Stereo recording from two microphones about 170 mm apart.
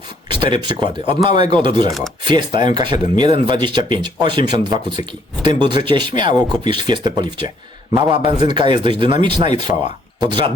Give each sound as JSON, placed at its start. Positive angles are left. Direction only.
{"t": 0.3, "sound": "speech", "side_deg": -30}